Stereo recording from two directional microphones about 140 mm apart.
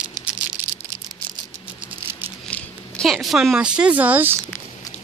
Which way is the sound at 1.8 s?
15° right (ahead or behind).